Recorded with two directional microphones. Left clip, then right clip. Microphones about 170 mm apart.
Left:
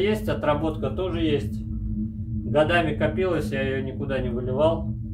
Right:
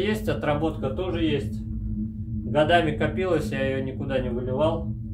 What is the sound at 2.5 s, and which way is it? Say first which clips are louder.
Speech: right 1 dB; 20° right (ahead or behind).